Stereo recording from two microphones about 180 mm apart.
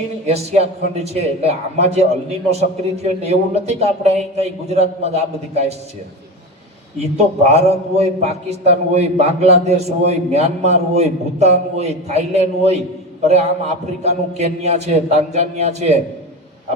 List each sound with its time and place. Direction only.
0.3 s a man's voice: 35° right (ahead or behind)
7.0 s a man's voice: 35° right (ahead or behind)